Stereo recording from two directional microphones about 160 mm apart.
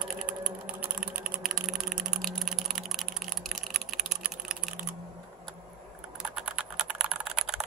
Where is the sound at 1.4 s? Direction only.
Centre (ahead or behind).